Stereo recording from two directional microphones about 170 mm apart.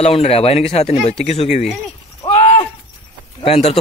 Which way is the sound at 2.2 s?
35° left (ahead or behind).